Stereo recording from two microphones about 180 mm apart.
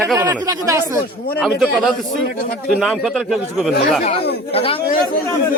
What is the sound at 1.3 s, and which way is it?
A man's voice, centre (ahead or behind).